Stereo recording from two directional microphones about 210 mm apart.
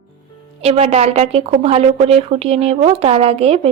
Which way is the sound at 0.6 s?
30° right (ahead or behind).